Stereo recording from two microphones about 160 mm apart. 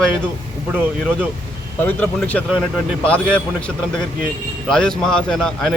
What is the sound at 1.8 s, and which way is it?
A man's voice, 10° left (ahead or behind).